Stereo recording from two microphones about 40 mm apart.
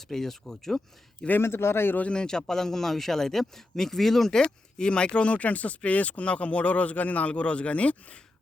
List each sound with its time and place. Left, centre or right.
0.1 s a man's voice: centre
1.4 s speech: left
2.1 s a man's voice: centre
4.8 s speech: left